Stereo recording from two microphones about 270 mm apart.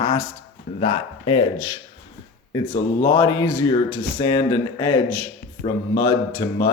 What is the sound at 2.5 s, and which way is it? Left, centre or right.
Speech, centre.